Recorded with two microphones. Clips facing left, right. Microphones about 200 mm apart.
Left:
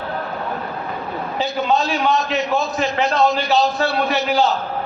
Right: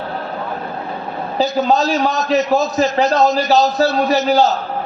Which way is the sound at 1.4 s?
40° right (ahead or behind).